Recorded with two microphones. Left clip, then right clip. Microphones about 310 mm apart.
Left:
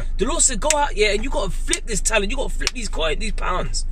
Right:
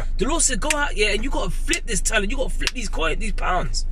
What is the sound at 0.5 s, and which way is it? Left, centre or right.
Speech, centre.